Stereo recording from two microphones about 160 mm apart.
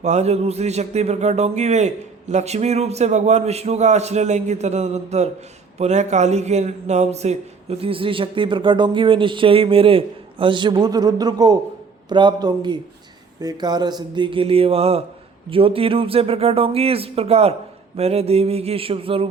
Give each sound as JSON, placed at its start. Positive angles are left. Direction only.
{"t": 0.0, "sound": "a man's voice", "side_deg": -45}